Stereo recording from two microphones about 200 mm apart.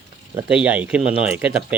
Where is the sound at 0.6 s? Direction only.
5° right (ahead or behind).